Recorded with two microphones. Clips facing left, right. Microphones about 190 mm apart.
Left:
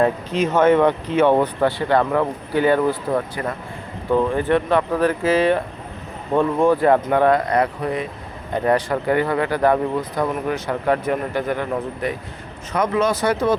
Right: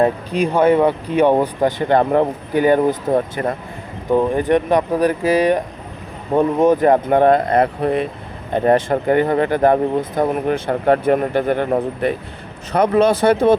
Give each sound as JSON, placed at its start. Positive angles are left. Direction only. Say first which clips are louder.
{"t": 0.0, "sound": "speech", "louder": "right 2 dB", "side_deg": -15}
{"t": 4.1, "sound": "speech", "louder": "right 3 dB", "side_deg": -15}